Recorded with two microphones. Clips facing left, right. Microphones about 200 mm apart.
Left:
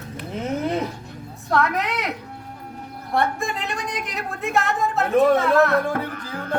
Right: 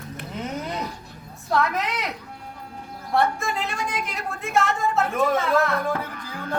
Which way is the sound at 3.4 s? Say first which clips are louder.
Even; centre (ahead or behind).